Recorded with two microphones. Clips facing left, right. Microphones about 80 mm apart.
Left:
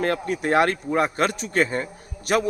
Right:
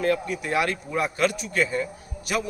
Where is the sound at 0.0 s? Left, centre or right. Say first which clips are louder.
Left 1 dB; left.